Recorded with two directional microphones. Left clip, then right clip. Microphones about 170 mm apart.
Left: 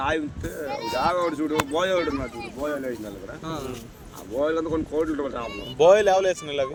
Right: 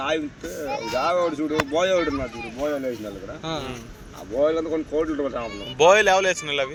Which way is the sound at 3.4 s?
85° left.